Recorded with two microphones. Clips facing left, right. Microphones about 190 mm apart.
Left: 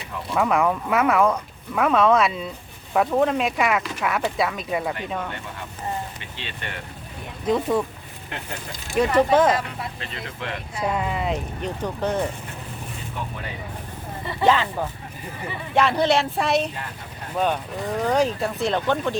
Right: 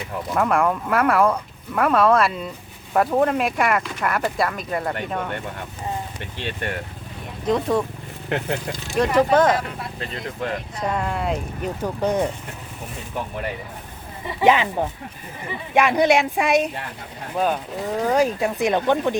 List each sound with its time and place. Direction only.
0.3 s speech: centre (ahead or behind)
6.4 s speech: 50° right (ahead or behind)
7.4 s speech: 5° left (ahead or behind)
9.0 s speech: 5° left (ahead or behind)
10.0 s speech: 40° right (ahead or behind)
10.8 s speech: 5° left (ahead or behind); by 12.2 s 10° right (ahead or behind)
14.3 s speech: 15° right (ahead or behind)